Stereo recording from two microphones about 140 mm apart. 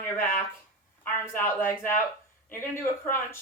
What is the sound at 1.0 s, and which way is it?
A woman's voice, 15° left (ahead or behind).